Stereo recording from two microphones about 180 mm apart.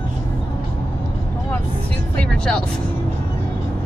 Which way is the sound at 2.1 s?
5° left (ahead or behind).